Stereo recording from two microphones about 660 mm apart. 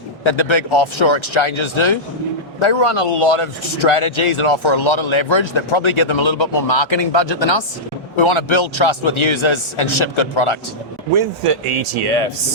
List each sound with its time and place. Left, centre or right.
0.3 s speech: left
11.1 s speech: right
11.6 s speech: right